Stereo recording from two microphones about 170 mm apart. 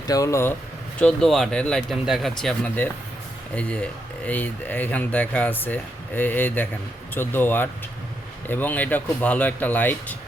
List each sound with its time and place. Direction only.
0.1 s speech: 20° left (ahead or behind)
0.9 s speech: 5° left (ahead or behind)